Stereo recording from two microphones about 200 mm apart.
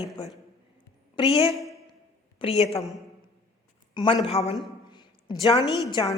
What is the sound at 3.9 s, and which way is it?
Speech, 25° left (ahead or behind).